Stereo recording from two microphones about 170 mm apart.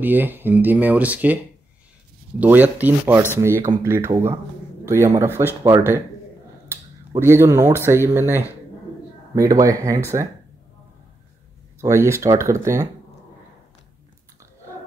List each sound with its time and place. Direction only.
0.0 s speech: 10° right (ahead or behind)
7.1 s speech: 15° right (ahead or behind)
11.8 s speech: 15° right (ahead or behind)